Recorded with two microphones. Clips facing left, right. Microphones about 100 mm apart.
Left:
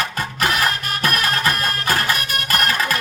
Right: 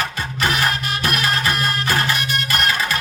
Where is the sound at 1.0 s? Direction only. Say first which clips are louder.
Left 1 dB; 45° left (ahead or behind).